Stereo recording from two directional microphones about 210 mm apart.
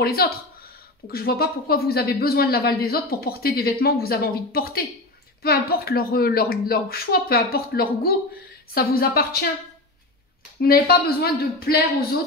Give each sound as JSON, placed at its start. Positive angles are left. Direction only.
{"t": 0.0, "sound": "speech", "side_deg": 45}
{"t": 10.6, "sound": "speech", "side_deg": 45}